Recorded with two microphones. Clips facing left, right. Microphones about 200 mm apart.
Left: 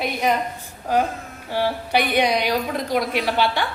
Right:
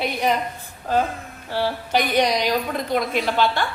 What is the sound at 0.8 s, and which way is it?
A woman's voice, 15° left (ahead or behind).